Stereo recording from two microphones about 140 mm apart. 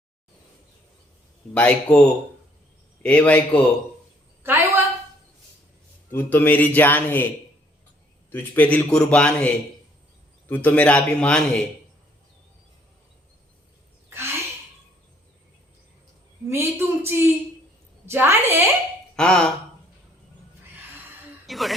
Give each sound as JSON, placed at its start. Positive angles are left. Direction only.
{"t": 1.5, "sound": "speech", "side_deg": 10}
{"t": 4.4, "sound": "a woman's voice", "side_deg": -15}
{"t": 6.1, "sound": "speech", "side_deg": 15}
{"t": 8.3, "sound": "speech", "side_deg": 10}
{"t": 10.5, "sound": "speech", "side_deg": 10}
{"t": 14.1, "sound": "a sound", "side_deg": -20}
{"t": 16.5, "sound": "a woman's voice", "side_deg": -20}
{"t": 19.1, "sound": "speech", "side_deg": 5}
{"t": 21.4, "sound": "speech", "side_deg": 0}